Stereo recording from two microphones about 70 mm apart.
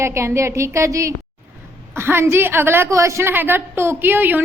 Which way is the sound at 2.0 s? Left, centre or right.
Right.